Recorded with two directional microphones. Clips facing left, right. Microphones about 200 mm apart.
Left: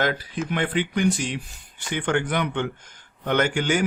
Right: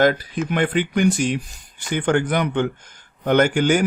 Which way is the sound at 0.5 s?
50° right (ahead or behind).